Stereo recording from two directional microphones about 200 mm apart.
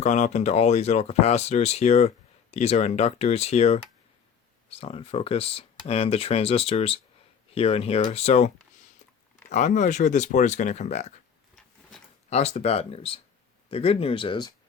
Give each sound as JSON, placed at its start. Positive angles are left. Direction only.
{"t": 0.0, "sound": "speech", "side_deg": 35}
{"t": 4.8, "sound": "speech", "side_deg": 30}
{"t": 11.5, "sound": "a sound", "side_deg": 5}
{"t": 12.3, "sound": "speech", "side_deg": 35}